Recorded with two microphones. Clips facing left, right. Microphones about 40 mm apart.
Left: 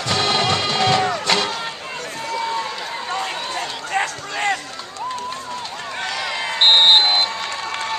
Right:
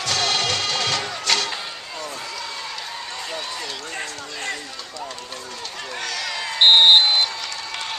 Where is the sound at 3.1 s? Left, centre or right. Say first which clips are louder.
Left 8 dB; left.